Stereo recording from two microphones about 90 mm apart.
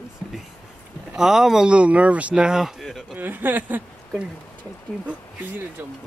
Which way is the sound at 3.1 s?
20° right (ahead or behind).